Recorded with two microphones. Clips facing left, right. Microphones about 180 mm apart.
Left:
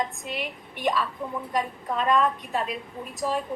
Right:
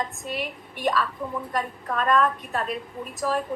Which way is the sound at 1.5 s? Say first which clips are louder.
Left 1 dB; 20° left (ahead or behind).